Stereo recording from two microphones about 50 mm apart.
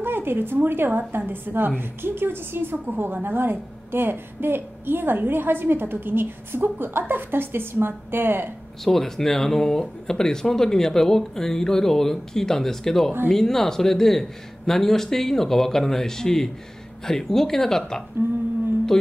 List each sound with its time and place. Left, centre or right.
0.0 s a woman's voice: right
8.8 s speech: centre